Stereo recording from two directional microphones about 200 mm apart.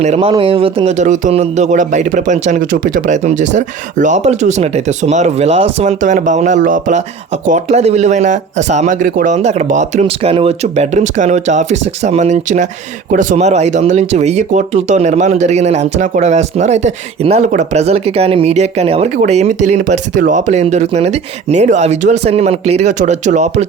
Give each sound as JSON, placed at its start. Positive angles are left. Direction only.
{"t": 0.0, "sound": "speech", "side_deg": -30}